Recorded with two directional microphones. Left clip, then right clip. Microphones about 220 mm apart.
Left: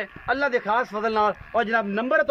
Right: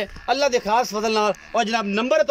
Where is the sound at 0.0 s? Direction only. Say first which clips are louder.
Right 3 dB; 10° right (ahead or behind).